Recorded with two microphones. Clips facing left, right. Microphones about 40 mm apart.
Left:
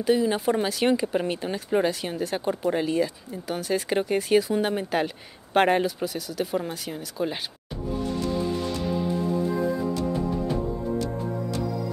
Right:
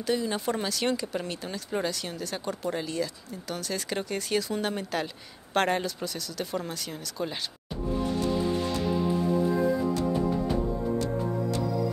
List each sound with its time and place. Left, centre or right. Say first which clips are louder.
0.0 s speech: left 6 dB; centre